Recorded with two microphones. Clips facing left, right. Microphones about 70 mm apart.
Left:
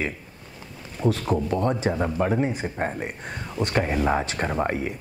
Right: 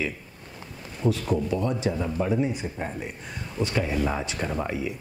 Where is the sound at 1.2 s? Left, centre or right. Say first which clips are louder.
Left 2 dB; left.